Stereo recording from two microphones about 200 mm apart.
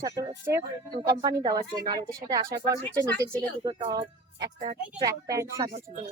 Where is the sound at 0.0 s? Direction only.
20° right (ahead or behind).